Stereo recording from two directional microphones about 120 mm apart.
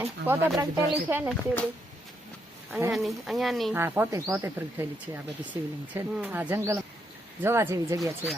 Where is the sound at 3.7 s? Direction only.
20° right (ahead or behind).